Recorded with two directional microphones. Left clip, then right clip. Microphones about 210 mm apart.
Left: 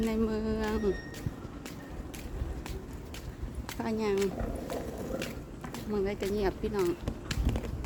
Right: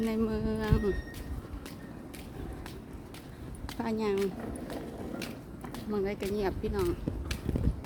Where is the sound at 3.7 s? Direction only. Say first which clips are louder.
Even; 20° right (ahead or behind).